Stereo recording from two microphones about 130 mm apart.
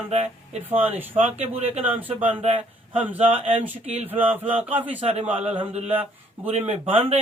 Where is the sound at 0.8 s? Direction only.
15° right (ahead or behind).